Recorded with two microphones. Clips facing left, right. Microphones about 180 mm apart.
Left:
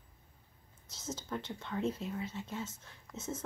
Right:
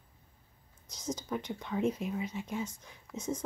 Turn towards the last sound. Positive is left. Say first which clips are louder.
# right 5 dB
turn(degrees=-15)  # may be behind; listen again after turning